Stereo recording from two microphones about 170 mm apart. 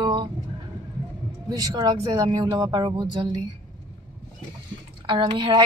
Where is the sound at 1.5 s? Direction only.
20° right (ahead or behind).